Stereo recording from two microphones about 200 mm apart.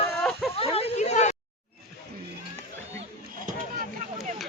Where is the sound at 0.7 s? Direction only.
30° left (ahead or behind).